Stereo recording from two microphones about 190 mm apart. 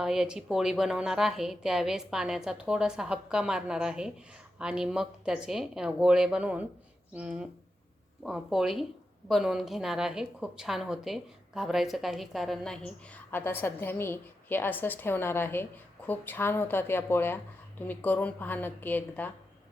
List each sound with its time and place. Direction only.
0.0 s a woman's voice: 5° right (ahead or behind)